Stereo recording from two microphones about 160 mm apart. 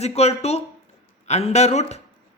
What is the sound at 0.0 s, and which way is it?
A man's voice, 40° left (ahead or behind).